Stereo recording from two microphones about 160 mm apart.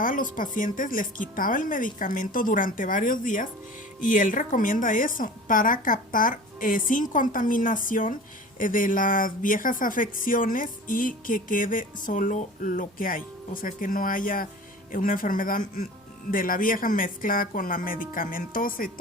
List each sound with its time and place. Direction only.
0.0 s speech: 55° left (ahead or behind)